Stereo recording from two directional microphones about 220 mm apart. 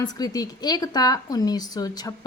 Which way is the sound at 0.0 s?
20° left (ahead or behind).